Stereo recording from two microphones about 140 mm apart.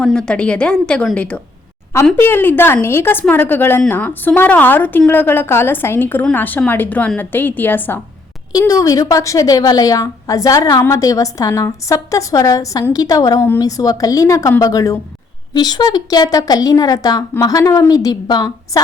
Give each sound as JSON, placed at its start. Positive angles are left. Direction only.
{"t": 0.0, "sound": "a woman's voice", "side_deg": 5}
{"t": 8.5, "sound": "a woman's voice", "side_deg": 25}